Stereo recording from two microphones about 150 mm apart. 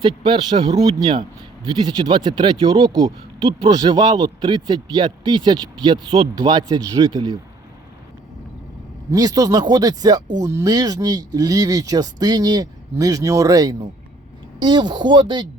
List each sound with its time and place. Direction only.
0.0 s a man's voice: 35° right (ahead or behind)
9.1 s a man's voice: 25° right (ahead or behind)